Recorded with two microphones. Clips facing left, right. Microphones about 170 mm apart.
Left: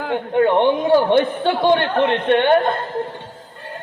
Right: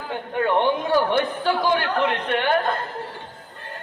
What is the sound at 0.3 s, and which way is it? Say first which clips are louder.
A woman's voice: left 5 dB; 20° left (ahead or behind).